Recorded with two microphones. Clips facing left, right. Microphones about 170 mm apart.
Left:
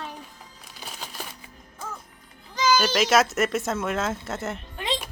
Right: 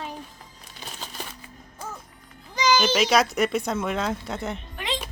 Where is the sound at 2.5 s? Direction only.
15° right (ahead or behind).